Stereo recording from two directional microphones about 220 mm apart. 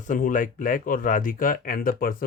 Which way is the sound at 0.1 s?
35° left (ahead or behind).